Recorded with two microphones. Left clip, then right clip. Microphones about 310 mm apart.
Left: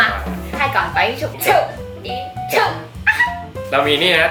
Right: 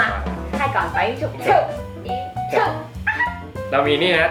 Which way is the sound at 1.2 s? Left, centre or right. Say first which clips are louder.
Left 2 dB; centre.